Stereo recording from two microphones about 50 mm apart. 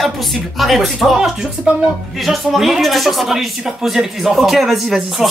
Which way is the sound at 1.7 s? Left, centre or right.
Centre.